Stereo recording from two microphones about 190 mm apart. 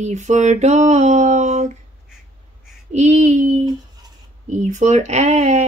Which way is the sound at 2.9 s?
35° right (ahead or behind).